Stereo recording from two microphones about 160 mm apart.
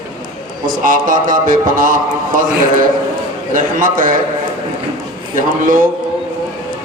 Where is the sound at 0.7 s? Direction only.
60° right (ahead or behind).